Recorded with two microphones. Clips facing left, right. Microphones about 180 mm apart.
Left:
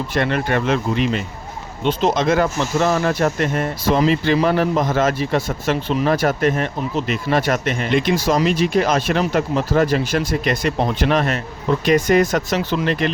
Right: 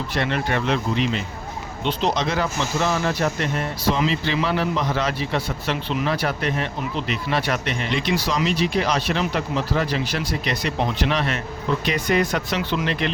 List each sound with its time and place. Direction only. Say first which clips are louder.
0.1 s a man's voice: left 4 dB; 50° left (ahead or behind)